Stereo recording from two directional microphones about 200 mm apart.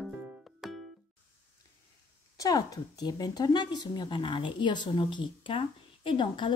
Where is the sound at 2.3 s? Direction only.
15° left (ahead or behind).